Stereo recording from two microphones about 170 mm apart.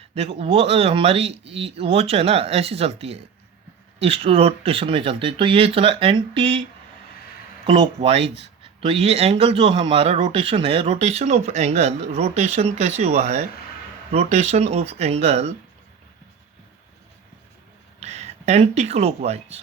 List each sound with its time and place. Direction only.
0.1 s speech: 35° right (ahead or behind)
7.7 s speech: 30° right (ahead or behind)
18.0 s speech: 40° right (ahead or behind)